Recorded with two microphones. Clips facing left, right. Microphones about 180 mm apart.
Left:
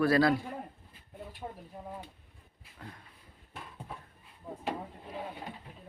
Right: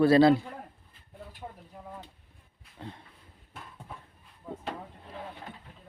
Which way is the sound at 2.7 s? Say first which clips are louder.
Right 5 dB; 25° right (ahead or behind).